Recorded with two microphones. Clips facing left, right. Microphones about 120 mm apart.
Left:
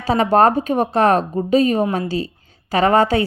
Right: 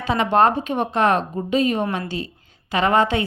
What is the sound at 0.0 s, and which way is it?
A woman's voice, 35° left (ahead or behind).